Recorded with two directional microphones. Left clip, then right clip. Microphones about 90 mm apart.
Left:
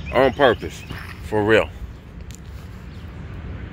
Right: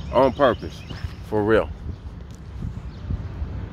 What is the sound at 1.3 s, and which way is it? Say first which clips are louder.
Speech: left 2 dB; 10° right (ahead or behind).